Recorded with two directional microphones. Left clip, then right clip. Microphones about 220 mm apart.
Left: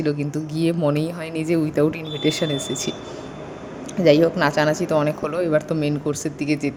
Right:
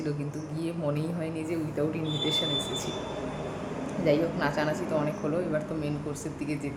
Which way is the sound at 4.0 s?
45° left (ahead or behind).